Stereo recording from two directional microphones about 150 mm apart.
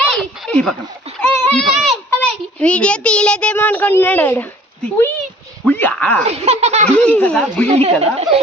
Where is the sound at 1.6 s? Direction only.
Centre (ahead or behind).